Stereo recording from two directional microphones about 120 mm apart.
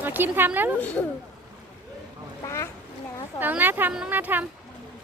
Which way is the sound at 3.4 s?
15° right (ahead or behind).